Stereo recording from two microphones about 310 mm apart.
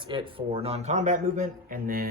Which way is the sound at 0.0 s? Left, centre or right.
Centre.